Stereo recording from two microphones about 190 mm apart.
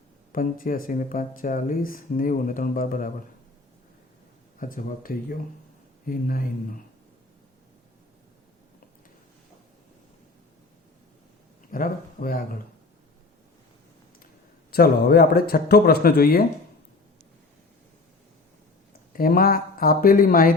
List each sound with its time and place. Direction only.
0.3 s speech: 45° left (ahead or behind)
4.6 s speech: 45° left (ahead or behind)
11.7 s speech: 45° left (ahead or behind)
14.7 s speech: 55° left (ahead or behind)
19.1 s speech: 50° left (ahead or behind)